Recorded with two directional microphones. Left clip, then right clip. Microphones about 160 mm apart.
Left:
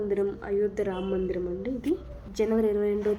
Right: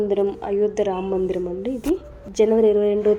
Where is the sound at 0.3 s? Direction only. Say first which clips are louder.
Right 6 dB; 20° right (ahead or behind).